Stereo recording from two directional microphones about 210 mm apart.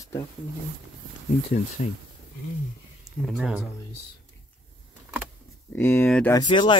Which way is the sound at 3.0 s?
Centre (ahead or behind).